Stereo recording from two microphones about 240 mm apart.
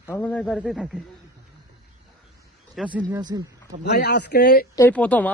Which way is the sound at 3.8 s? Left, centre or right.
Left.